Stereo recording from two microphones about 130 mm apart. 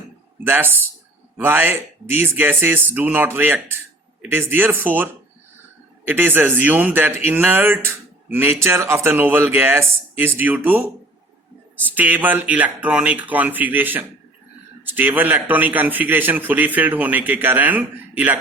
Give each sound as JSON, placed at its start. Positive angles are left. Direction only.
{"t": 0.4, "sound": "speech", "side_deg": -15}
{"t": 6.1, "sound": "speech", "side_deg": -15}
{"t": 11.9, "sound": "speech", "side_deg": -15}